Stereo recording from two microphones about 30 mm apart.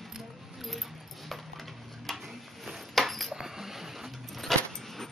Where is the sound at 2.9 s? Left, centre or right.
Centre.